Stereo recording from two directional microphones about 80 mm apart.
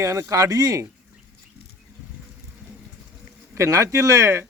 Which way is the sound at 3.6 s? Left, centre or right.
Right.